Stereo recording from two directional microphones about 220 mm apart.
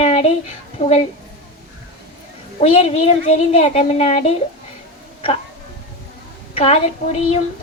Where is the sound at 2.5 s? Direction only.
30° left (ahead or behind).